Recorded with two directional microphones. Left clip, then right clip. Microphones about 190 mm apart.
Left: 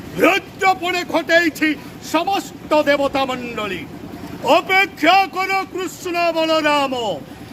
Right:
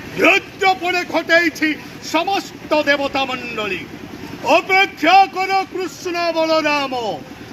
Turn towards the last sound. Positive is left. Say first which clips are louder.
# left 1 dB
turn(degrees=30)  # may be behind; listen again after turning